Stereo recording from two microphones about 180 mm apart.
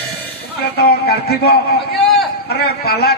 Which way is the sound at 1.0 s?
60° left (ahead or behind).